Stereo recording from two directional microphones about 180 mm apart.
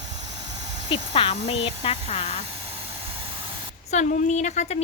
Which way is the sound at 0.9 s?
30° left (ahead or behind).